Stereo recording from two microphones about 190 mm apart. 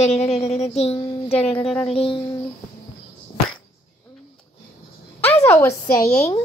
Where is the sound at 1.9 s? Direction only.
30° left (ahead or behind).